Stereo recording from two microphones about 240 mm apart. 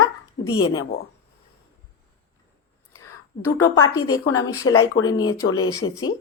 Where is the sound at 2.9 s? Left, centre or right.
Centre.